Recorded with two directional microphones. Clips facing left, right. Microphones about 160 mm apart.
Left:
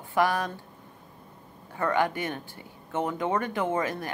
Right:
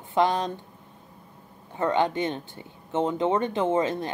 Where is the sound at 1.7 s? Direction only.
20° right (ahead or behind).